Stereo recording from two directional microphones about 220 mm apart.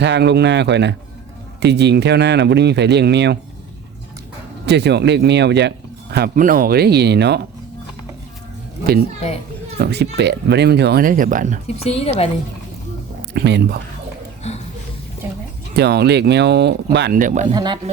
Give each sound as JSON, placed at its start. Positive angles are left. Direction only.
{"t": 0.0, "sound": "speech", "side_deg": -50}
{"t": 4.6, "sound": "speech", "side_deg": -50}
{"t": 9.7, "sound": "speech", "side_deg": -50}
{"t": 11.8, "sound": "a woman's voice", "side_deg": 25}
{"t": 13.3, "sound": "speech", "side_deg": -50}
{"t": 15.7, "sound": "speech", "side_deg": -50}
{"t": 17.5, "sound": "speech", "side_deg": -20}